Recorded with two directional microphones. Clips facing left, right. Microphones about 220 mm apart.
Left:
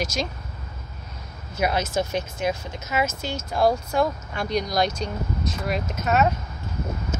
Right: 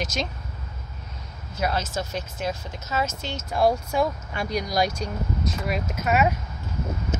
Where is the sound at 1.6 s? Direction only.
15° left (ahead or behind).